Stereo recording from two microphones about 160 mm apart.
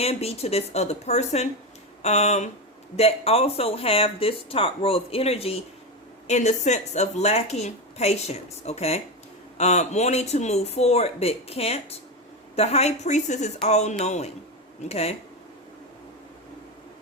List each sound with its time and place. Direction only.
0.0 s a woman's voice: 40° left (ahead or behind)